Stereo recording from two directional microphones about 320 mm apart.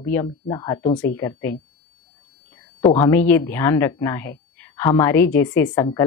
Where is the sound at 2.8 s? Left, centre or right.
Centre.